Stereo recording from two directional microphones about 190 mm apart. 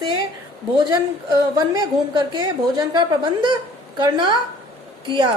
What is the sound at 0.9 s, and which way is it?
A woman's voice, 20° right (ahead or behind).